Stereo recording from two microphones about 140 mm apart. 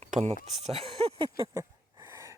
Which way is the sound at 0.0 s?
55° right (ahead or behind).